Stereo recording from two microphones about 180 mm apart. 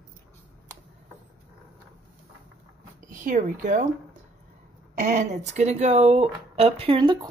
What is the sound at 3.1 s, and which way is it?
Speech, 45° right (ahead or behind).